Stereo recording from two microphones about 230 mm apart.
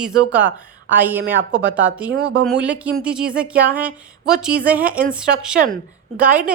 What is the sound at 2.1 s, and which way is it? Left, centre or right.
Speech, right.